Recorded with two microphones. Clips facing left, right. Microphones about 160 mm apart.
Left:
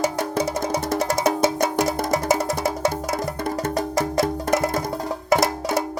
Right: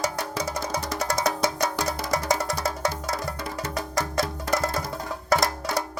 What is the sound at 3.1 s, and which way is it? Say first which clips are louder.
Music: left 6 dB; 55° left (ahead or behind).